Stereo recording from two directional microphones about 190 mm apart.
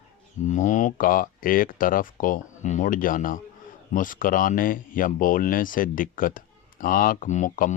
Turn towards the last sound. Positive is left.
turn(degrees=40)  # may be behind; listen again after turning